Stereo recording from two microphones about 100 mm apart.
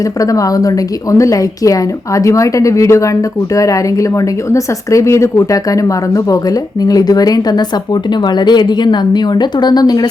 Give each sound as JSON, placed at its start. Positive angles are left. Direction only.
{"t": 0.2, "sound": "a woman's voice", "side_deg": 35}